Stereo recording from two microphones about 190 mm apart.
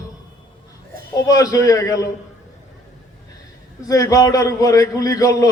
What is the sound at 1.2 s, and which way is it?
Speech, 20° left (ahead or behind).